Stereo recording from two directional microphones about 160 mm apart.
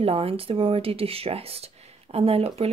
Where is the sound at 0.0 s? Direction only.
35° right (ahead or behind).